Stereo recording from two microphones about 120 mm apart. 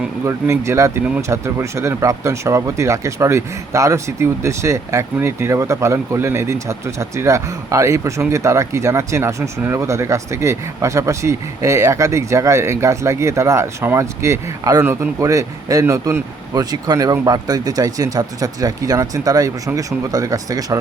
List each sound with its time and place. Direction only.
0.3 s speech: 25° right (ahead or behind)